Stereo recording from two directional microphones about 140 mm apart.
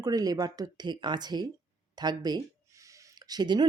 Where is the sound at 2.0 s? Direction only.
30° right (ahead or behind).